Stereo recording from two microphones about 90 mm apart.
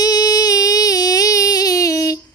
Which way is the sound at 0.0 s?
45° left (ahead or behind).